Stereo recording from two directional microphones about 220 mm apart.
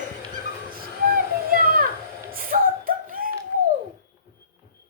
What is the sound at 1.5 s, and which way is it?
Children playing, 40° right (ahead or behind).